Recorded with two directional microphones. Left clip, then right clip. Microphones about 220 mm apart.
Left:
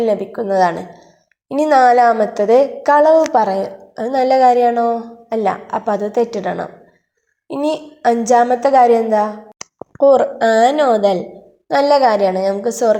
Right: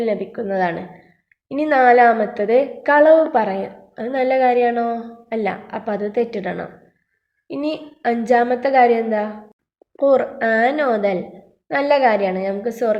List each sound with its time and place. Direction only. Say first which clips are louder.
0.0 s a woman's voice: left 5 dB; 10° left (ahead or behind)